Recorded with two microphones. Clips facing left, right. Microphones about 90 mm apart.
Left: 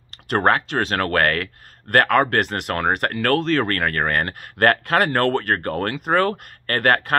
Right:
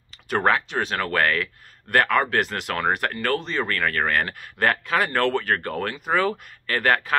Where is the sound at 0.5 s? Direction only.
55° left (ahead or behind).